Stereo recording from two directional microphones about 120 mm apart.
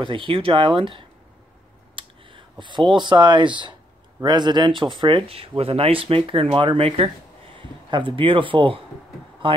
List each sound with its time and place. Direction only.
0.0 s speech: 45° right (ahead or behind)
2.0 s a sound: 45° right (ahead or behind)
2.5 s speech: 40° right (ahead or behind)